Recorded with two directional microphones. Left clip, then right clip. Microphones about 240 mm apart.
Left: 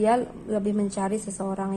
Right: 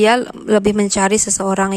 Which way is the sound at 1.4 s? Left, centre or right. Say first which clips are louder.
Right 13 dB; right.